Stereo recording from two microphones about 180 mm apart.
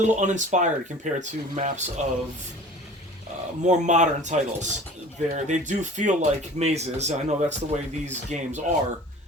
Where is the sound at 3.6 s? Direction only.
40° right (ahead or behind).